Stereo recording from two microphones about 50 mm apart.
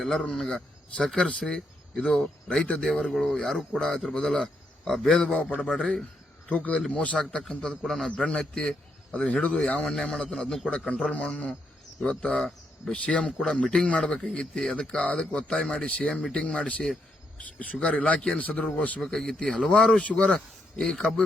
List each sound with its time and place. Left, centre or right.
0.0 s speech: centre
3.1 s speech: centre
3.8 s speech: centre
7.9 s speech: centre
8.1 s speech: centre
9.4 s speech: left
9.8 s speech: centre
10.7 s speech: left
12.9 s speech: left
19.0 s speech: centre
20.0 s speech: left
20.7 s speech: centre